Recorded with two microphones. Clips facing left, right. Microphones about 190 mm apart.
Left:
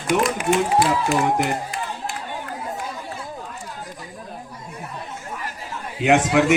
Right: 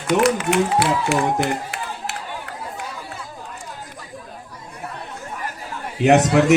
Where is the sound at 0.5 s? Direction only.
75° right (ahead or behind).